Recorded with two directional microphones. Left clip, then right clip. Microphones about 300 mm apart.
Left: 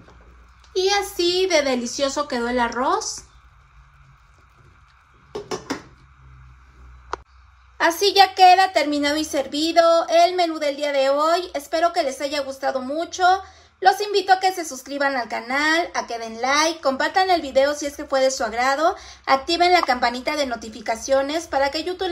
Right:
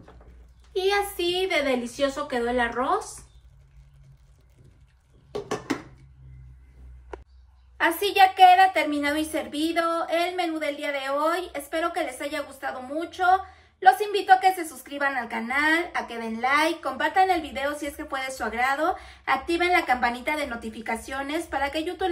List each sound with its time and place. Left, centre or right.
0.7 s a child's voice: centre
7.7 s a woman's voice: centre